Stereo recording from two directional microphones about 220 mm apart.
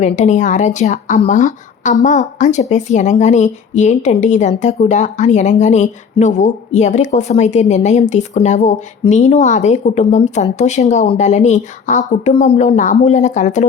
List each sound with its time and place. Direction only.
0.0 s speech: 35° left (ahead or behind)